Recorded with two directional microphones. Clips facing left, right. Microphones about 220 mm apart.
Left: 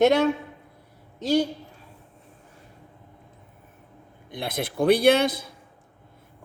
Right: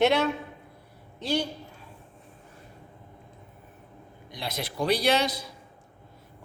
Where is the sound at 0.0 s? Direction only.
45° left (ahead or behind).